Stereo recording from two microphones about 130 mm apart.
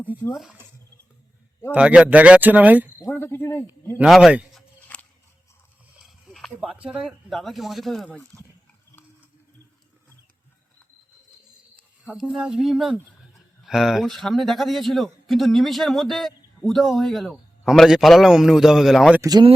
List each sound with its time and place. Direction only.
1.7 s speech: 10° right (ahead or behind)
3.0 s speech: 20° left (ahead or behind)
4.0 s a man's voice: 5° right (ahead or behind)
4.9 s a sound: 10° left (ahead or behind)
6.0 s a sound: centre (ahead or behind)
6.9 s a man's voice: centre (ahead or behind)
12.1 s a man's voice: centre (ahead or behind)
19.2 s speech: 30° right (ahead or behind)